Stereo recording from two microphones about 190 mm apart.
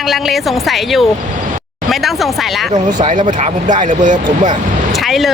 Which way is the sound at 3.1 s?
40° right (ahead or behind).